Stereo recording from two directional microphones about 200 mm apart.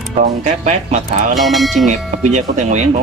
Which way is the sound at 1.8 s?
35° right (ahead or behind).